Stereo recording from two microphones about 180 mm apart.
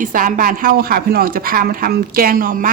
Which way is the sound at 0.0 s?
50° right (ahead or behind).